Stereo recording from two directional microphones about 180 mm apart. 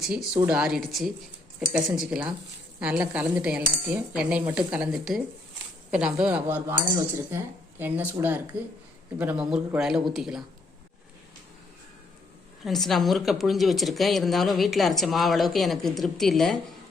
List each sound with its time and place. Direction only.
0.0 s a woman's voice: centre (ahead or behind)
2.8 s cutlery: 5° right (ahead or behind)
9.1 s speech: 5° right (ahead or behind)
12.6 s speech: centre (ahead or behind)